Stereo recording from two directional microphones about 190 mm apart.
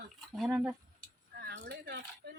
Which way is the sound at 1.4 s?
55° right (ahead or behind).